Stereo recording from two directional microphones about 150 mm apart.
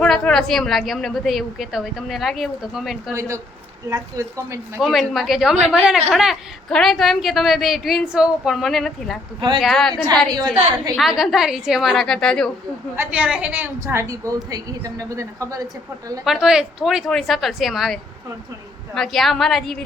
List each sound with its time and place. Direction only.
0.0 s speech: 5° left (ahead or behind)
3.2 s a woman's voice: 20° right (ahead or behind)
4.8 s speech: centre (ahead or behind)
10.3 s a woman's voice: 25° right (ahead or behind)
10.9 s speech: centre (ahead or behind)
13.0 s a woman's voice: 10° right (ahead or behind)
16.2 s speech: 5° right (ahead or behind)